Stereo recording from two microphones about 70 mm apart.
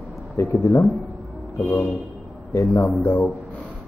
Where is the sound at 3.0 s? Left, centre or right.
Left.